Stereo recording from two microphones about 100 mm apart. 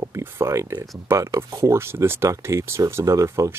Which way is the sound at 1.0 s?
30° right (ahead or behind).